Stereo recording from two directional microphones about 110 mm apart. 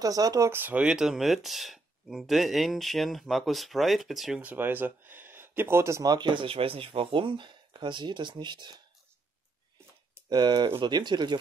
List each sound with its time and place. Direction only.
0.0 s speech: 35° right (ahead or behind)
0.5 s speech: 15° right (ahead or behind); by 4.4 s centre (ahead or behind)
4.4 s speech: 15° right (ahead or behind)
6.1 s speech: 45° right (ahead or behind)
10.3 s speech: 40° right (ahead or behind)